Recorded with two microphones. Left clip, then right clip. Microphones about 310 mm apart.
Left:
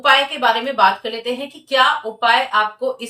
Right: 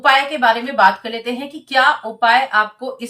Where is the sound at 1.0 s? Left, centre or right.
Centre.